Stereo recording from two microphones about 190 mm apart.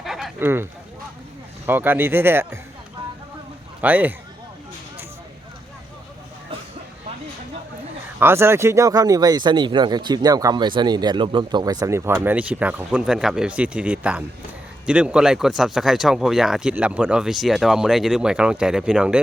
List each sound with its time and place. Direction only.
0.0 s a sound: centre (ahead or behind)
1.6 s speech: 10° right (ahead or behind)
3.8 s speech: 10° right (ahead or behind)
8.2 s speech: 15° right (ahead or behind)